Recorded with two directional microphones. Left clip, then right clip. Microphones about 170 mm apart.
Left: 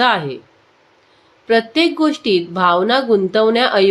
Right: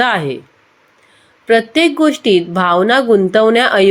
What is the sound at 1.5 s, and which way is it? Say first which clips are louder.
Speech: right 3 dB; 25° right (ahead or behind).